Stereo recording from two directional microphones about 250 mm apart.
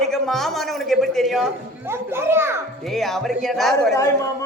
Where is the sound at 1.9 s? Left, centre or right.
Centre.